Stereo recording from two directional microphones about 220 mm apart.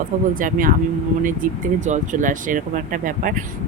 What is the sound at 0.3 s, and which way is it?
Speech, 40° right (ahead or behind).